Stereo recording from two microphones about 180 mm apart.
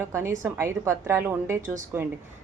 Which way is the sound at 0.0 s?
15° right (ahead or behind).